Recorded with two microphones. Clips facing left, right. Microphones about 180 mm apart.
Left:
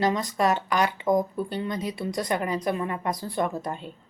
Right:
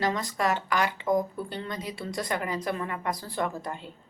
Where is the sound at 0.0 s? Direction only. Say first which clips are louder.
Left 4 dB; 20° left (ahead or behind).